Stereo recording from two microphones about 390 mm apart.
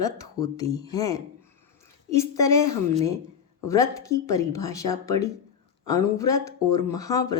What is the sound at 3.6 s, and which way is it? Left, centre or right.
Speech, centre.